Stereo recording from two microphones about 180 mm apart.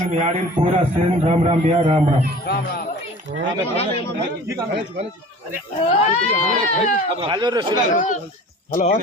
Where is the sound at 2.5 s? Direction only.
60° left (ahead or behind).